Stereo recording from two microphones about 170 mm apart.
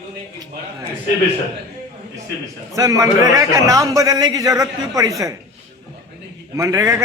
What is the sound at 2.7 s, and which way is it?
A man's voice, 20° right (ahead or behind).